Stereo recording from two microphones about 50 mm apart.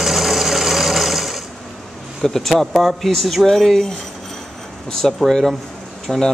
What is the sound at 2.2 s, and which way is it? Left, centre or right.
Speech, centre.